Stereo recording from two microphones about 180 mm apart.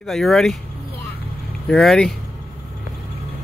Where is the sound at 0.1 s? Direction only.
Centre (ahead or behind).